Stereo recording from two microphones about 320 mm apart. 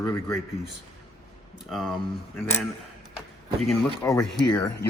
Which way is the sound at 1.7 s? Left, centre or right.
Centre.